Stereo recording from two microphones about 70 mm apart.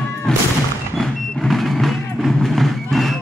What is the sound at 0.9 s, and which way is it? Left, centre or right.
Vehicle, centre.